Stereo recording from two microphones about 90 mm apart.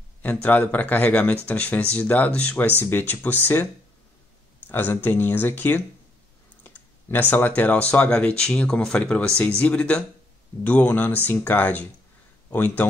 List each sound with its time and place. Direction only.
0.2 s speech: 20° left (ahead or behind)
4.6 s speech: 20° left (ahead or behind)